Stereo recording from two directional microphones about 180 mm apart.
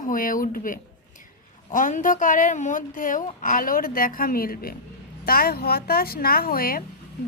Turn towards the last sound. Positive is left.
turn(degrees=55)  # may be behind; listen again after turning